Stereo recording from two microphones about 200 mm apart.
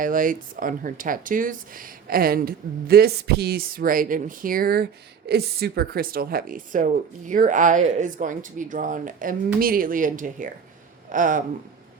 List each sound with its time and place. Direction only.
0.0 s speech: 45° right (ahead or behind)